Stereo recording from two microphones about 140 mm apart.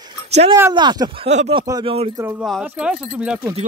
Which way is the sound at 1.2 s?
55° right (ahead or behind).